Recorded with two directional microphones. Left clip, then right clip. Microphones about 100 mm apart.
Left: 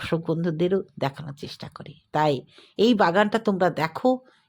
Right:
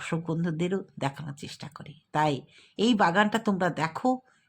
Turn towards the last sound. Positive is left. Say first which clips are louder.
# left 5 dB
turn(degrees=30)  # may be behind; listen again after turning